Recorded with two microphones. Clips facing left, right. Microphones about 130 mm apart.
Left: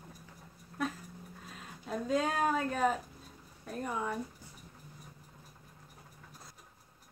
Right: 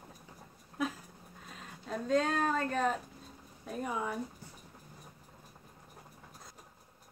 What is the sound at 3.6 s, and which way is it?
Speech, 5° right (ahead or behind).